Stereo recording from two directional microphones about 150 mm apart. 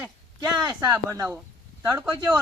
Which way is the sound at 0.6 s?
20° right (ahead or behind).